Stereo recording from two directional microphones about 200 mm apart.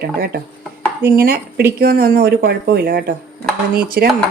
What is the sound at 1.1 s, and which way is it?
Speech, 50° right (ahead or behind).